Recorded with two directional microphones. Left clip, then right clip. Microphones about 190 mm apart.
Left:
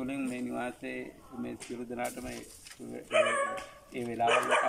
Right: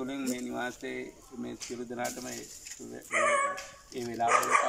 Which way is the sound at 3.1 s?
50° left (ahead or behind).